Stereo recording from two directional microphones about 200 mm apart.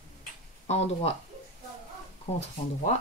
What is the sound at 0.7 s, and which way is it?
Speech, 30° left (ahead or behind).